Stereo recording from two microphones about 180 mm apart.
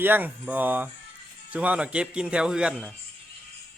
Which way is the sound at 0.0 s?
10° right (ahead or behind).